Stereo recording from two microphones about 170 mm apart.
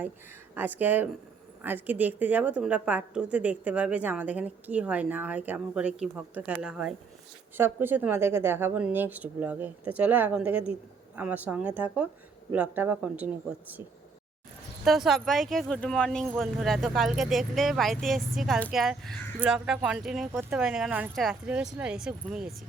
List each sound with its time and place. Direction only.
0.5 s a woman's voice: 10° right (ahead or behind)
14.8 s speech: centre (ahead or behind)